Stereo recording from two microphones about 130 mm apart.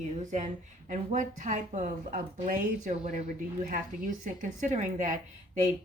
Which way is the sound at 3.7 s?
90° right.